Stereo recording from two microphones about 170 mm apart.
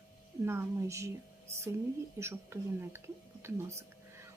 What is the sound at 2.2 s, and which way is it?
A woman's voice, 15° right (ahead or behind).